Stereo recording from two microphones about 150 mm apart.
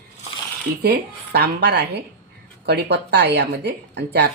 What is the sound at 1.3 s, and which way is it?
Speech, 90° right.